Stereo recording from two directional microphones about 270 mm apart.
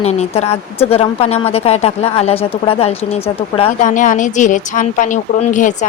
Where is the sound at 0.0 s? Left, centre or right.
Left.